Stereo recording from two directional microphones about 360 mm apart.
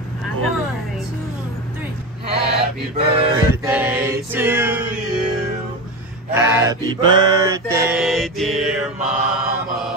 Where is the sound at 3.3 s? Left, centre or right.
Centre.